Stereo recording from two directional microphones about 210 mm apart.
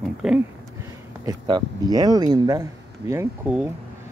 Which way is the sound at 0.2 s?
5° right (ahead or behind).